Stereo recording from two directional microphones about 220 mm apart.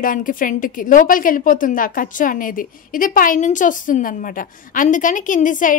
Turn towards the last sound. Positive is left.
turn(degrees=35)  # may be behind; listen again after turning